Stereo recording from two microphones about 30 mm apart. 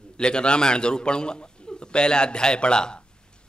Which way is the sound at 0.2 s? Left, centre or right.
Left.